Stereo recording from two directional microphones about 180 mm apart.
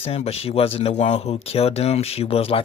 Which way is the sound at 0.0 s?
35° left (ahead or behind).